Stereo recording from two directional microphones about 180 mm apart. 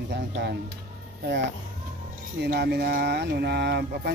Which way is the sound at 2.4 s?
65° right (ahead or behind).